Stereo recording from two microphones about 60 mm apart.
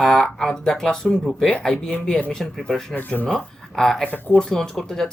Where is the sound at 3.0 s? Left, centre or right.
Left.